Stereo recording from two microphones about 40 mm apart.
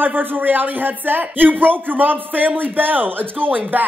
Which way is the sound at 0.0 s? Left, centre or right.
Right.